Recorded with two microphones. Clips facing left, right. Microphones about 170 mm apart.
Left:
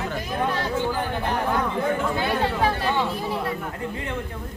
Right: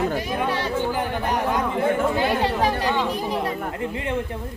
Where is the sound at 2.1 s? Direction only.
15° right (ahead or behind).